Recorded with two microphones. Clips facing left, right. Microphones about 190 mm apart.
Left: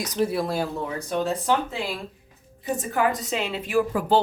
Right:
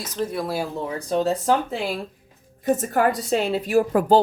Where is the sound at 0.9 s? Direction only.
35° right (ahead or behind).